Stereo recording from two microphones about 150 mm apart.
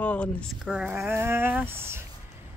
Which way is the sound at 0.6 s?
5° right (ahead or behind).